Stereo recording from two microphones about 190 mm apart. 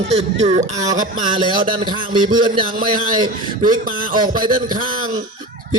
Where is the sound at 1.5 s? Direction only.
25° right (ahead or behind).